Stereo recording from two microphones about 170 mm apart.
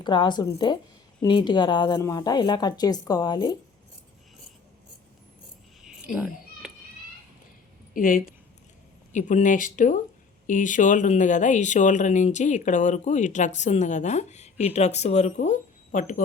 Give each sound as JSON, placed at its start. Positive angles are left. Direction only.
{"t": 0.0, "sound": "a woman's voice", "side_deg": 25}
{"t": 6.1, "sound": "cat", "side_deg": -5}
{"t": 7.9, "sound": "speech", "side_deg": 55}